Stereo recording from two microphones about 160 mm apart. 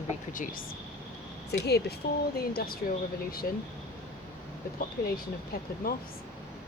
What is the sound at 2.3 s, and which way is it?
Speech, 70° left (ahead or behind).